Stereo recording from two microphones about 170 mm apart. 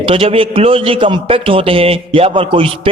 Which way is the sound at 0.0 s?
35° right (ahead or behind).